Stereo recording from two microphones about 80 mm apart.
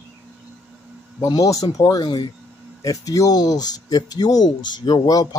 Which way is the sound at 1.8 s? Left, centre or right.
Left.